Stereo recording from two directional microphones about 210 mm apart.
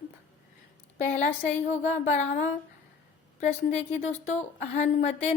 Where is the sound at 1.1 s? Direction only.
35° left (ahead or behind).